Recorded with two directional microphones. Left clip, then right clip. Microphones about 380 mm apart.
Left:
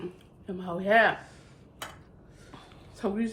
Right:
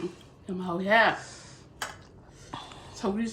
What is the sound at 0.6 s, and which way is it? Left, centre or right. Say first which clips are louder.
Speech: even; centre.